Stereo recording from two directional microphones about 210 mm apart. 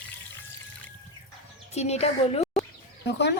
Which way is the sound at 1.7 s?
30° left (ahead or behind).